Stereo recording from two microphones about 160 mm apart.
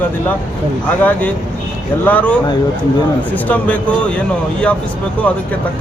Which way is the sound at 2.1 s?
10° left (ahead or behind).